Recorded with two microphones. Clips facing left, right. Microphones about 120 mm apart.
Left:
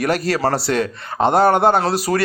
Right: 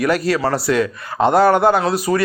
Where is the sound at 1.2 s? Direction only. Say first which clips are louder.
Right 1 dB; 25° left (ahead or behind).